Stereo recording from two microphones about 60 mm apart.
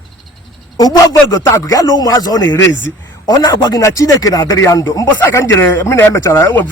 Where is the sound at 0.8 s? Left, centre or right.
Left.